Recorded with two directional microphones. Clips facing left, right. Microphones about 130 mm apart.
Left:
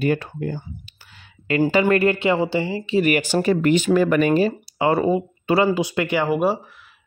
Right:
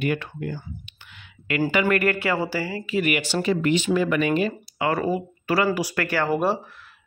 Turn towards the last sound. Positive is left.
turn(degrees=10)  # may be behind; listen again after turning